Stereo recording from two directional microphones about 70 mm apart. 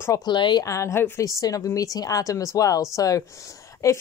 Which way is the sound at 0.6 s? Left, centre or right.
Left.